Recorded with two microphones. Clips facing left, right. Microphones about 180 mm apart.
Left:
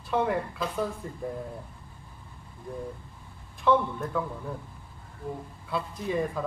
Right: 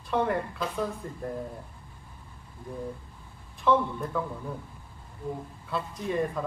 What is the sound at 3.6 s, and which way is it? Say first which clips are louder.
Speech: even; centre (ahead or behind).